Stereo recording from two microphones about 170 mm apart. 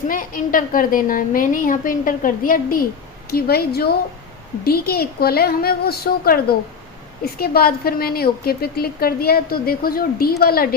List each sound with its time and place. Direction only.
0.1 s a woman's voice: 55° left (ahead or behind)
3.2 s a woman's voice: 65° left (ahead or behind)